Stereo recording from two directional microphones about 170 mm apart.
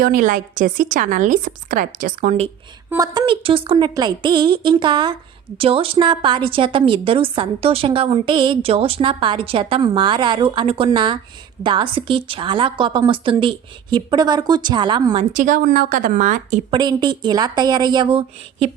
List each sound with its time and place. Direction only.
0.0 s a woman's voice: 55° right (ahead or behind)
2.9 s a woman's voice: 25° right (ahead or behind)
15.3 s a woman's voice: 50° right (ahead or behind)
16.7 s a woman's voice: 25° right (ahead or behind)